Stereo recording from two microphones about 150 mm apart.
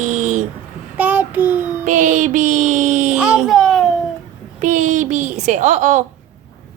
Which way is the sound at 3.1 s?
10° right (ahead or behind).